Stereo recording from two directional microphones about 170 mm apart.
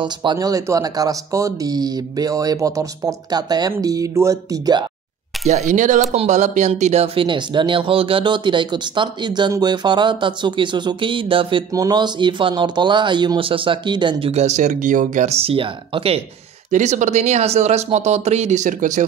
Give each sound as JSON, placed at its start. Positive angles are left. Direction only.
{"t": 0.0, "sound": "speech", "side_deg": -25}
{"t": 5.5, "sound": "speech", "side_deg": -45}
{"t": 16.7, "sound": "speech", "side_deg": -45}